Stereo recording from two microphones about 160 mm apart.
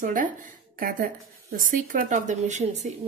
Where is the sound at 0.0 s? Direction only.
60° right (ahead or behind).